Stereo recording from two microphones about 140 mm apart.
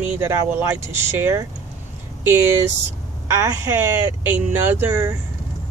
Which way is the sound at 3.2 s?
20° right (ahead or behind).